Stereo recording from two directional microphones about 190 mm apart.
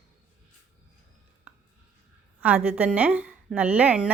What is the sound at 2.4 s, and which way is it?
Speech, 5° right (ahead or behind).